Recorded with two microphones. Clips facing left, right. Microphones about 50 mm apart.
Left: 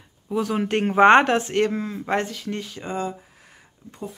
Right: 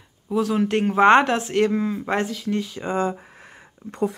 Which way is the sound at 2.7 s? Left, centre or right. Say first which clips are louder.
Right 3 dB; right.